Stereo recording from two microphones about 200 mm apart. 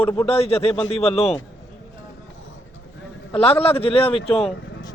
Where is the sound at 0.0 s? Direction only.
15° left (ahead or behind).